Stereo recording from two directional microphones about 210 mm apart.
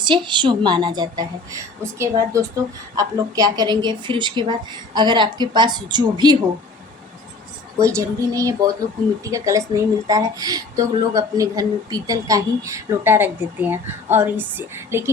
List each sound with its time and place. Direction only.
0.0 s a woman's voice: 20° right (ahead or behind)
7.8 s speech: 15° right (ahead or behind)